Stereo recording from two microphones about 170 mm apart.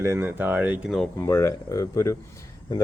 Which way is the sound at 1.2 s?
15° left (ahead or behind).